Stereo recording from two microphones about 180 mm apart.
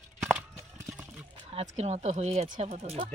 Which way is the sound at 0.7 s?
15° right (ahead or behind).